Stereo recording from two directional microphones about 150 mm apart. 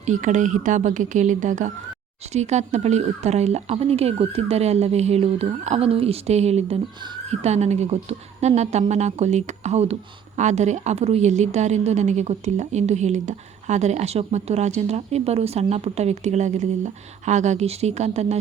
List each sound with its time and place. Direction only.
0.0 s a woman's voice: 55° right (ahead or behind)